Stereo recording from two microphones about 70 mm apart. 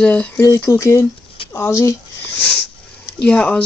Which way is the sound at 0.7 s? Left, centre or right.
Left.